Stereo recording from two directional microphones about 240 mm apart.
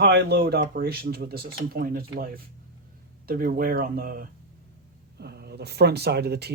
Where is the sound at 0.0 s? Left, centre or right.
Right.